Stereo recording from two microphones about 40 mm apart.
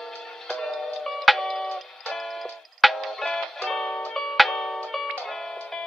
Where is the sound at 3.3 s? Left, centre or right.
Centre.